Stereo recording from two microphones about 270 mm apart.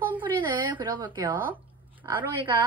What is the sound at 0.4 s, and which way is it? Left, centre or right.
Speech, centre.